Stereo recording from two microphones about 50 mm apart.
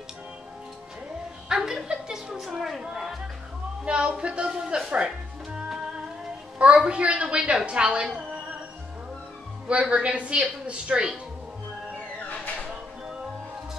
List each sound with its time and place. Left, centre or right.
1.5 s a sound: centre
2.9 s music: centre
3.8 s speech: centre
6.6 s a woman's voice: right
9.7 s a woman's voice: right